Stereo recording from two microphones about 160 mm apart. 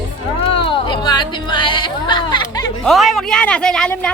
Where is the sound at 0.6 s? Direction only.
30° left (ahead or behind).